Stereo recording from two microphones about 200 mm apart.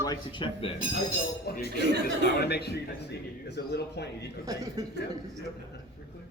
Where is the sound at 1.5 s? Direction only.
50° left (ahead or behind).